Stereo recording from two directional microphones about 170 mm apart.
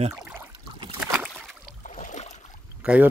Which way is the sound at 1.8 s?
50° left (ahead or behind).